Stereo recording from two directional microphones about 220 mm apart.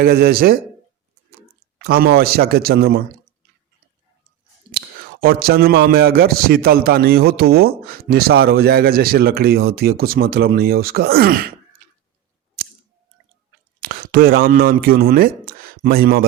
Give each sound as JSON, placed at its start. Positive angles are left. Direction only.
{"t": 0.0, "sound": "a man's voice", "side_deg": -45}
{"t": 1.8, "sound": "a man's voice", "side_deg": -45}
{"t": 4.7, "sound": "a man's voice", "side_deg": -45}
{"t": 13.8, "sound": "speech", "side_deg": -40}